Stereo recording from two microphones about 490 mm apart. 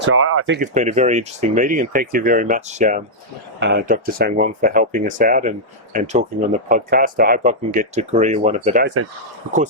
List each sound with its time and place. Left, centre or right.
0.0 s speech: right